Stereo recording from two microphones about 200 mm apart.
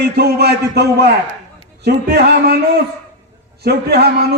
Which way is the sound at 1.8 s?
50° right (ahead or behind).